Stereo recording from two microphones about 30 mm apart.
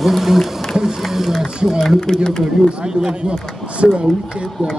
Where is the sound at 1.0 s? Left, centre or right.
Centre.